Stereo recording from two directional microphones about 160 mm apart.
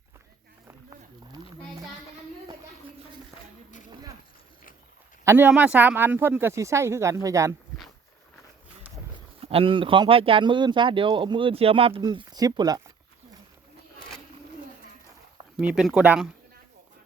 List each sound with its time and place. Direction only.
0.7 s a sound: 20° right (ahead or behind)
5.2 s speech: 15° right (ahead or behind)
9.4 s speech: 35° right (ahead or behind)
15.5 s speech: 5° right (ahead or behind)